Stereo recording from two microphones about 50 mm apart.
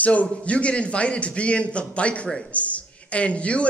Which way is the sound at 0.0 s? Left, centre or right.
Left.